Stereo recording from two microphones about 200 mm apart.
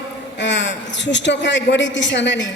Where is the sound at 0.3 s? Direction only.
65° left (ahead or behind).